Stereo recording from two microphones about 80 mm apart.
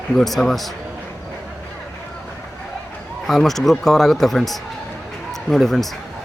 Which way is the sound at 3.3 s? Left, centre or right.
Centre.